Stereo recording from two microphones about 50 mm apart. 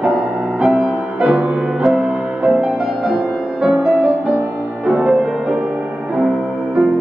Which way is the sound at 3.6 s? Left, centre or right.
Centre.